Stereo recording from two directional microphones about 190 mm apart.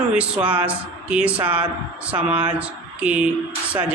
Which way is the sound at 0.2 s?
5° right (ahead or behind).